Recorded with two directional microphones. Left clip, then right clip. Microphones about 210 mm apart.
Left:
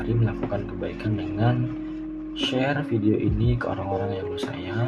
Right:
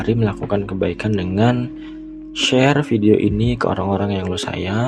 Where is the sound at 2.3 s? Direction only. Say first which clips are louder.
Right 10 dB; 50° right (ahead or behind).